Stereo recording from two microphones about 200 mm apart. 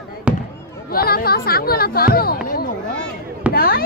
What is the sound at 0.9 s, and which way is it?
Speech, 50° left (ahead or behind).